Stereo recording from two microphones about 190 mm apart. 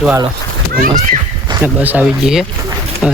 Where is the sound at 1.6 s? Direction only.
10° right (ahead or behind).